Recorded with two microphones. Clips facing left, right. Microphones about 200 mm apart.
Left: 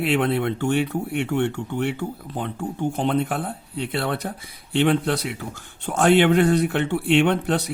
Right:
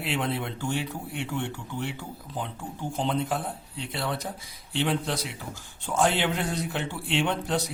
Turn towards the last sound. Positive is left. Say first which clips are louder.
# left 7 dB
turn(degrees=65)  # may be behind; listen again after turning